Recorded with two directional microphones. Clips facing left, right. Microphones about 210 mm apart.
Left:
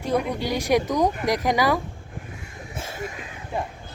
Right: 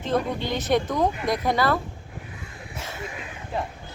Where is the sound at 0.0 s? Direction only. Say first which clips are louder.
Left 1 dB; 15° left (ahead or behind).